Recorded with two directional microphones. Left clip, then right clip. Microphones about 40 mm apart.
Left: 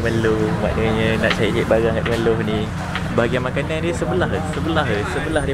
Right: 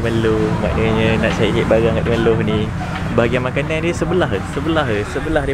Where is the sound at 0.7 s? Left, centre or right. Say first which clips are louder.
Right 4 dB; right.